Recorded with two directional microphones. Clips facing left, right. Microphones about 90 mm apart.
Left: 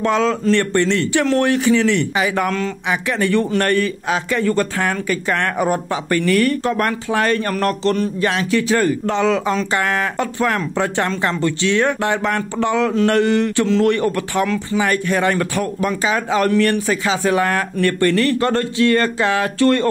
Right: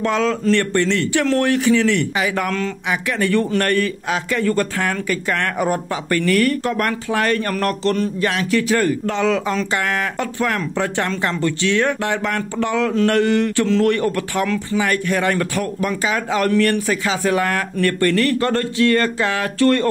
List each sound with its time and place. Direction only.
0.0 s speech: 30° left (ahead or behind)